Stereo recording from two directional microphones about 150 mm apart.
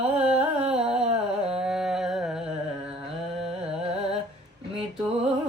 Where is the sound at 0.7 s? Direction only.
45° right (ahead or behind).